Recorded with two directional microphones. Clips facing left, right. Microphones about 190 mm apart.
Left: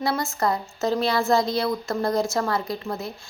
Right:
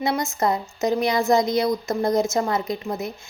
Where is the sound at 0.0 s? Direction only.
20° right (ahead or behind).